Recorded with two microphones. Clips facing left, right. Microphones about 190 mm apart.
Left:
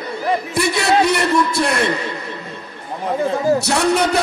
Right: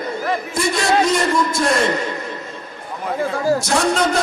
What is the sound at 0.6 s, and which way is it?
A man's voice, 65° left (ahead or behind).